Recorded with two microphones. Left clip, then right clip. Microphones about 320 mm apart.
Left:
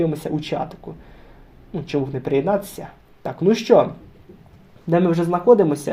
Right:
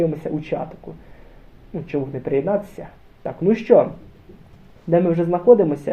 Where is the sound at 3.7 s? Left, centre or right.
Left.